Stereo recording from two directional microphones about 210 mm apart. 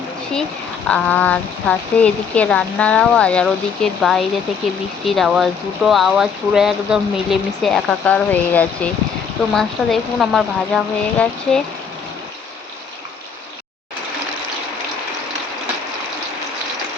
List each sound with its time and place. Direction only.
0.9 s speech: 5° left (ahead or behind)